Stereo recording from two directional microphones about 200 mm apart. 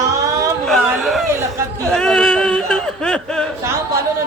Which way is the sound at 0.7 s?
Centre (ahead or behind).